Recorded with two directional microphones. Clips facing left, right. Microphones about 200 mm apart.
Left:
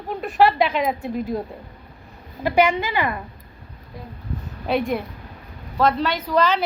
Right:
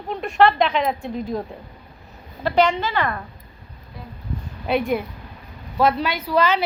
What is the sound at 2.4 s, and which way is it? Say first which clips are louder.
Speech: even; 10° left (ahead or behind).